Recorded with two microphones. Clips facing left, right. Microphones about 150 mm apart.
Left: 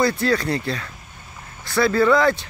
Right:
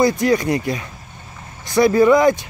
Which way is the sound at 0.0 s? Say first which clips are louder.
Right 4 dB; 15° right (ahead or behind).